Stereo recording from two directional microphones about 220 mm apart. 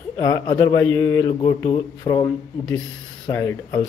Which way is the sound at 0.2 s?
20° left (ahead or behind).